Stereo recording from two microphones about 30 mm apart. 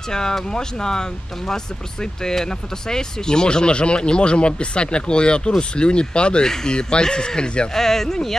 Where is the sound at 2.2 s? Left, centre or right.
Left.